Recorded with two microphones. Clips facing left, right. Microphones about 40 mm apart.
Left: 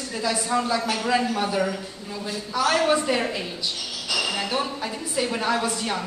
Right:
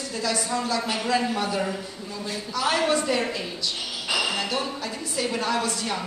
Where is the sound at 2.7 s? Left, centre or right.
Centre.